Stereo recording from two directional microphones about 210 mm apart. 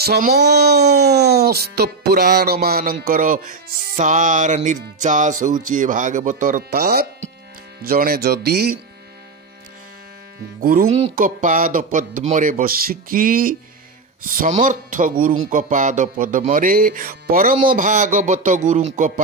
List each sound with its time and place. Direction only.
0.0 s speech: 50° right (ahead or behind)
5.0 s music: 35° right (ahead or behind)
7.8 s speech: 45° right (ahead or behind)
10.6 s speech: 45° right (ahead or behind)
10.9 s music: 35° right (ahead or behind)